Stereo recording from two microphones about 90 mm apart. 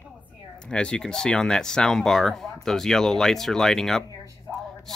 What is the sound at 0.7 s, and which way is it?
Speech, 10° left (ahead or behind).